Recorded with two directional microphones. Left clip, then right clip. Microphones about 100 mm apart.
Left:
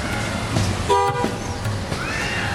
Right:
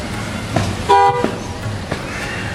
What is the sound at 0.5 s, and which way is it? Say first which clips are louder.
Vehicle: right 7 dB; 20° right (ahead or behind).